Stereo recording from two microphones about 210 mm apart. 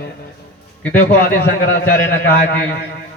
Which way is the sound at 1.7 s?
45° left (ahead or behind).